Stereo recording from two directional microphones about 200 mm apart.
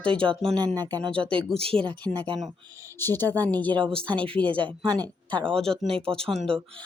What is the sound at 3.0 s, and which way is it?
Speech, 10° left (ahead or behind).